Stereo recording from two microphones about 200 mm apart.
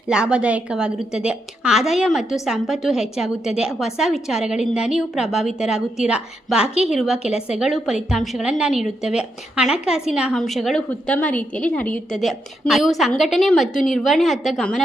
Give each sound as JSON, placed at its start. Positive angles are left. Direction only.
{"t": 0.1, "sound": "a woman's voice", "side_deg": -5}